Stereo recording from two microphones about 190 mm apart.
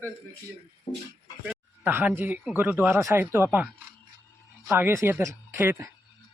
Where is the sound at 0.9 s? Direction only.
25° left (ahead or behind).